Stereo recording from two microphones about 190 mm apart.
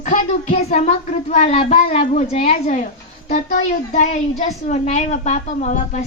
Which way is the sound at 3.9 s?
40° left (ahead or behind).